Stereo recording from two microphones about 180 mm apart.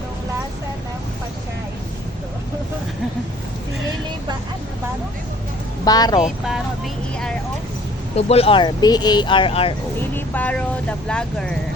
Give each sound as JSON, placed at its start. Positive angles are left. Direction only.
{"t": 5.8, "sound": "speech", "side_deg": 20}
{"t": 8.1, "sound": "speech", "side_deg": 35}
{"t": 10.2, "sound": "speech", "side_deg": 10}